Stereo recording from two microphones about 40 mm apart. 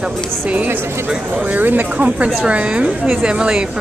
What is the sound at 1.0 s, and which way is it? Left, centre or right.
Speech, right.